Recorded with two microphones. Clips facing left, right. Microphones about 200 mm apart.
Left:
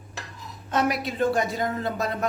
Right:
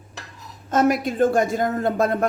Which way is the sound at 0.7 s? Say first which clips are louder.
Right 6 dB; 45° right (ahead or behind).